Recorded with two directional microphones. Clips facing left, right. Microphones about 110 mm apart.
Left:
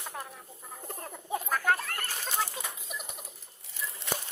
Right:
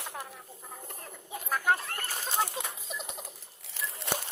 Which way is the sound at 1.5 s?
10° right (ahead or behind).